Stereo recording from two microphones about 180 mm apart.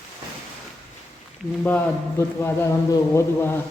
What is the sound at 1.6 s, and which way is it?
A man's voice, 10° left (ahead or behind).